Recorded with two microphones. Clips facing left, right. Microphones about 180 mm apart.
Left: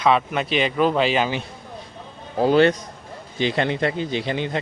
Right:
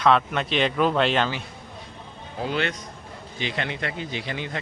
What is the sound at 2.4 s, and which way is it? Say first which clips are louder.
Speech: left 11 dB; 40° left (ahead or behind).